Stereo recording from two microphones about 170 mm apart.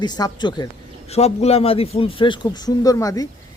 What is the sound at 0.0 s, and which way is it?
Speech, 25° left (ahead or behind).